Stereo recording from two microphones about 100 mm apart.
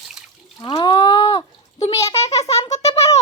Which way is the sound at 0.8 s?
45° left (ahead or behind).